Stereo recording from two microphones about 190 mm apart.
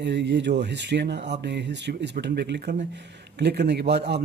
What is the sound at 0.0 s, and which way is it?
Speech, 65° right (ahead or behind).